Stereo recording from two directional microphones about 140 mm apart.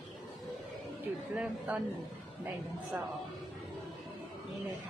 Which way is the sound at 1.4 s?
10° right (ahead or behind).